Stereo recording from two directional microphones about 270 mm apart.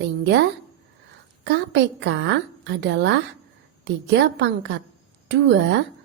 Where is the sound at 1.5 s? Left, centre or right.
Right.